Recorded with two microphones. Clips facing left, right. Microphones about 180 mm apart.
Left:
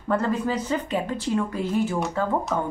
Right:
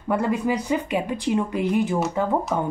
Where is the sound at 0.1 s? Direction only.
10° right (ahead or behind).